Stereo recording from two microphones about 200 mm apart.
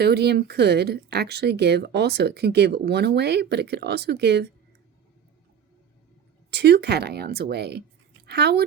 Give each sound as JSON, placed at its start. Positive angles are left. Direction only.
{"t": 0.0, "sound": "speech", "side_deg": -55}
{"t": 6.5, "sound": "speech", "side_deg": -55}